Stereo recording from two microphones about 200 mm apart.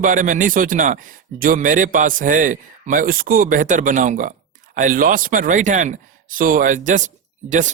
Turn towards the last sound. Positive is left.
turn(degrees=-40)  # may be behind; listen again after turning